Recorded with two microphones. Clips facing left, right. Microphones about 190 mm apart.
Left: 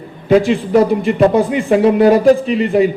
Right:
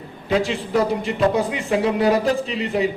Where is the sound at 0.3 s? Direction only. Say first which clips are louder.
Left 9 dB; 55° left (ahead or behind).